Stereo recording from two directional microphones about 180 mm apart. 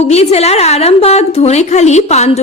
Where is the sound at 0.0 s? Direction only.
35° left (ahead or behind).